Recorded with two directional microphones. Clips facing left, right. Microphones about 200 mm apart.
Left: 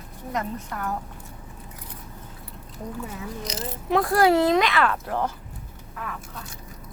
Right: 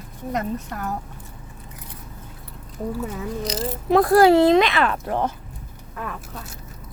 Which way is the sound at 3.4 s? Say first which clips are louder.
Right 6 dB; 35° right (ahead or behind).